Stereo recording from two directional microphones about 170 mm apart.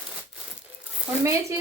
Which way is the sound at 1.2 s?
20° right (ahead or behind).